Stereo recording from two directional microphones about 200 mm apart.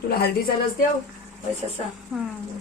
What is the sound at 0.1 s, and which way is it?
Speech, 50° left (ahead or behind).